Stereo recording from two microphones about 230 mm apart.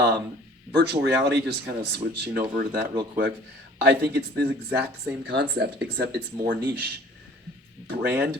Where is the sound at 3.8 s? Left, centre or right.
Right.